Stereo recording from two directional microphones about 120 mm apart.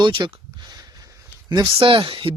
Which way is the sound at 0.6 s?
35° right (ahead or behind).